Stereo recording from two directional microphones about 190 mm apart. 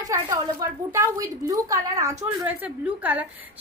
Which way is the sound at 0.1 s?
15° right (ahead or behind).